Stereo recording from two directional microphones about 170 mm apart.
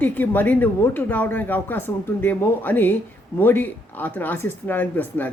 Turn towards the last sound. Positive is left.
turn(degrees=10)  # may be behind; listen again after turning